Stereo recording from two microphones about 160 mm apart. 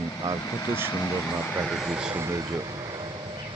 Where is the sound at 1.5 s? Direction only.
5° right (ahead or behind).